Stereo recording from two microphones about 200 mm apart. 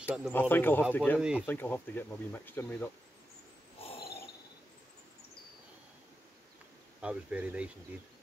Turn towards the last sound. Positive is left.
turn(degrees=-5)  # may be behind; listen again after turning